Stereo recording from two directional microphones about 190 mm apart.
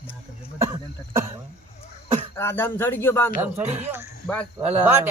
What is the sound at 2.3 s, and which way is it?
Speech, 10° left (ahead or behind).